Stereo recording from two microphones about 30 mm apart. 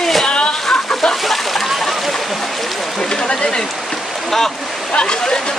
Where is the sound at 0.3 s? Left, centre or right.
Left.